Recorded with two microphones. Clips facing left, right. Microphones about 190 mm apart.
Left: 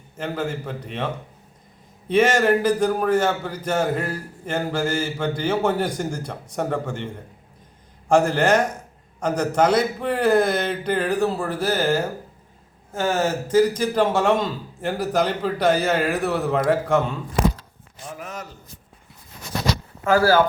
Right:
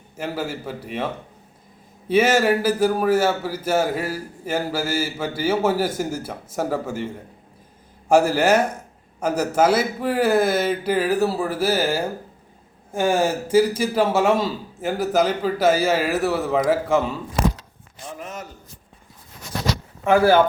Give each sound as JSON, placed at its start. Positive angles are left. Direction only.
{"t": 0.2, "sound": "a man's voice", "side_deg": -5}
{"t": 2.0, "sound": "a man's voice", "side_deg": -5}
{"t": 8.1, "sound": "a man's voice", "side_deg": -5}
{"t": 18.2, "sound": "a sound", "side_deg": 0}
{"t": 20.1, "sound": "speech", "side_deg": -20}